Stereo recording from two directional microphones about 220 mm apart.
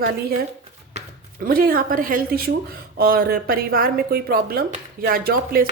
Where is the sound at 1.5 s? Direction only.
40° right (ahead or behind).